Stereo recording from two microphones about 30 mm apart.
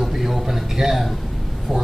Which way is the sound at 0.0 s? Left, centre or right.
Centre.